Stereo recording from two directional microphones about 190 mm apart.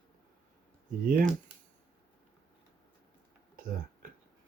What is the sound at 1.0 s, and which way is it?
Speech, 45° right (ahead or behind).